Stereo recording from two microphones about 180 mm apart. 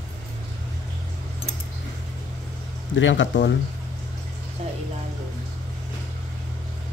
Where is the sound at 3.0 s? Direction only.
90° left.